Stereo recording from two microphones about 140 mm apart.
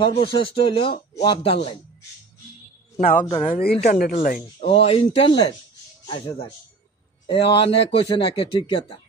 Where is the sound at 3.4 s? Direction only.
60° left (ahead or behind).